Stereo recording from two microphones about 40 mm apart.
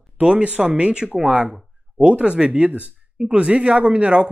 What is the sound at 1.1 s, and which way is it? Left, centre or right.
Speech, centre.